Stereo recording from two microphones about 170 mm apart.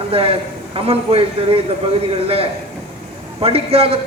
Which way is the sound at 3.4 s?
35° right (ahead or behind).